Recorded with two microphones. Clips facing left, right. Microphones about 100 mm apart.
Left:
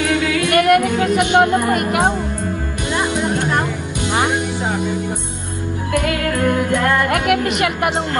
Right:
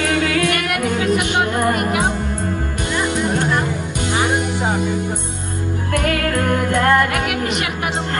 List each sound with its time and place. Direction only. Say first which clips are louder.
0.5 s music: left 7 dB; 45° left (ahead or behind)
7.1 s a woman's voice: left 4 dB; 50° left (ahead or behind)